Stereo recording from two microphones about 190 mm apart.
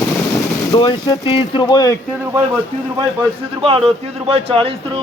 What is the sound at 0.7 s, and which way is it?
Speech, 25° left (ahead or behind).